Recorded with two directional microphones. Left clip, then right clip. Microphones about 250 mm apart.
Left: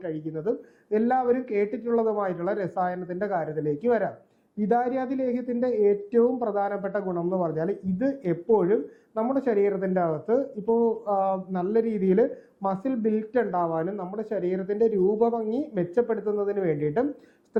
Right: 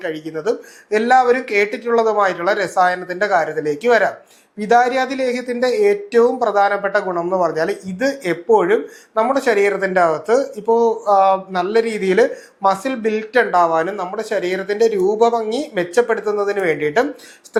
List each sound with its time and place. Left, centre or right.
0.0 s speech: centre
10.7 s speech: right
11.2 s speech: centre